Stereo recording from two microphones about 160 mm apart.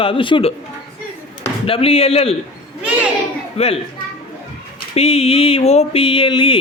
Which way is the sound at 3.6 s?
40° left (ahead or behind).